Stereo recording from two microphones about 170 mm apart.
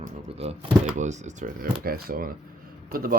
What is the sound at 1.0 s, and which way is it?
Speech, 45° right (ahead or behind).